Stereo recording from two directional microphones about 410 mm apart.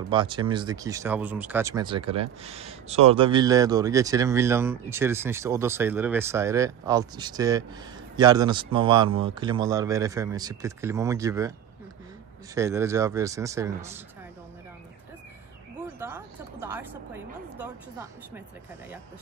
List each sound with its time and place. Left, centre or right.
0.1 s speech: centre
12.5 s speech: centre
16.0 s a woman's voice: centre